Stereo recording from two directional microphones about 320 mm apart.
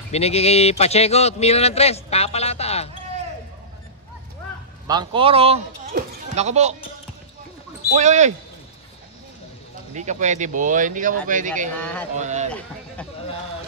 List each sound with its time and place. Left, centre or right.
0.1 s a man's voice: centre
4.8 s speech: centre
7.9 s speech: right
9.9 s speech: right
11.8 s a sound: centre
12.2 s speech: right